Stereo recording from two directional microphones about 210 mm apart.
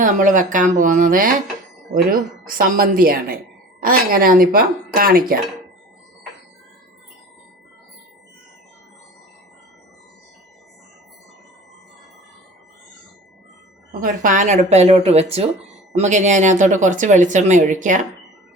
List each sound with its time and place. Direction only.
0.0 s speech: 40° right (ahead or behind)
14.0 s speech: 40° right (ahead or behind)